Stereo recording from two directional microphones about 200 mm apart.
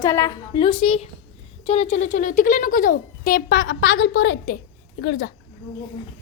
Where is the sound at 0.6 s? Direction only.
30° left (ahead or behind); by 5.3 s 50° left (ahead or behind).